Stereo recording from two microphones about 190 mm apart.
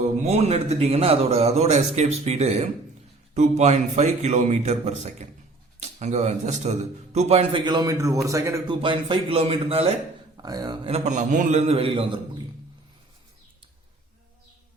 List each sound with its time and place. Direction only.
0.3 s a man's voice: 35° right (ahead or behind)
10.3 s speech: 20° right (ahead or behind)
10.9 s speech: 40° right (ahead or behind)